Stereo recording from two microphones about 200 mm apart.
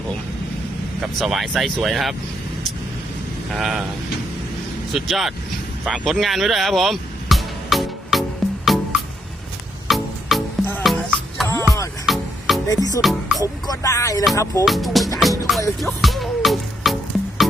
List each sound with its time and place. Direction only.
1.2 s speech: centre (ahead or behind)
3.5 s speech: centre (ahead or behind)
4.9 s speech: centre (ahead or behind)
5.8 s music: centre (ahead or behind)
12.6 s music: 20° left (ahead or behind)
13.0 s music: centre (ahead or behind)
13.4 s music: 15° left (ahead or behind)
14.6 s speech: centre (ahead or behind)
15.2 s music: centre (ahead or behind)